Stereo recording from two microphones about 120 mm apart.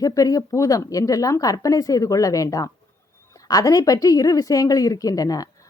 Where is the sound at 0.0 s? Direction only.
30° left (ahead or behind).